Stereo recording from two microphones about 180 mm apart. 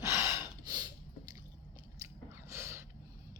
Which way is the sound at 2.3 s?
15° right (ahead or behind).